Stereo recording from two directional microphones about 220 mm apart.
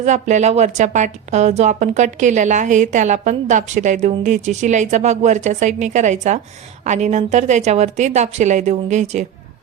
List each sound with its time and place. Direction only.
0.0 s a woman's voice: 35° right (ahead or behind)